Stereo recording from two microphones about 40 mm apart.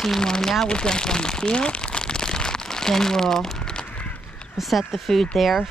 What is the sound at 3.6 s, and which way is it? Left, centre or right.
Crow, left.